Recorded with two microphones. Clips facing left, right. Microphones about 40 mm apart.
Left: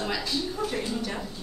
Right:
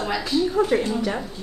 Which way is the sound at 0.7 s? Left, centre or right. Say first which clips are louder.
Right 10 dB; right.